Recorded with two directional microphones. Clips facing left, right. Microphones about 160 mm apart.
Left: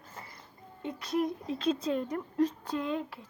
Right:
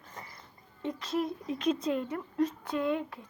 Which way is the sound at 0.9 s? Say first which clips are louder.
Left 1 dB; 10° left (ahead or behind).